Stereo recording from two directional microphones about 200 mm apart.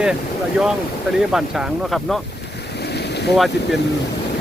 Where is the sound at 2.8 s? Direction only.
55° left (ahead or behind).